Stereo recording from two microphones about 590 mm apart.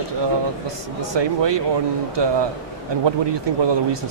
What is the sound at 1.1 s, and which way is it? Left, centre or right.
Speech, right.